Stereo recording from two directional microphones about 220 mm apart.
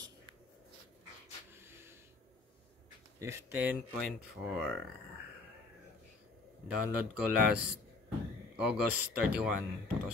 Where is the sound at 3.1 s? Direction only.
10° right (ahead or behind).